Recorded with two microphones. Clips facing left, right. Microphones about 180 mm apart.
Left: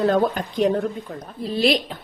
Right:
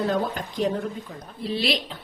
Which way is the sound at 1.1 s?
55° left (ahead or behind).